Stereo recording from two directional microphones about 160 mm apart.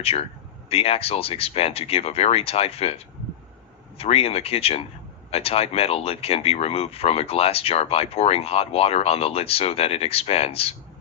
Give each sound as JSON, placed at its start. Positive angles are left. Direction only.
{"t": 0.0, "sound": "speech", "side_deg": 40}